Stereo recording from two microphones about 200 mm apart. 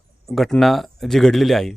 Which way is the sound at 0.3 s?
Centre (ahead or behind).